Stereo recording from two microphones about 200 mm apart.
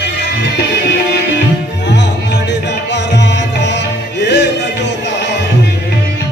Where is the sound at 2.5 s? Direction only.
60° left (ahead or behind).